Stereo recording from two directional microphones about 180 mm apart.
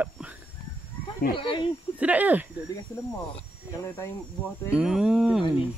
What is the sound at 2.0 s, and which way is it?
Speech, 10° right (ahead or behind).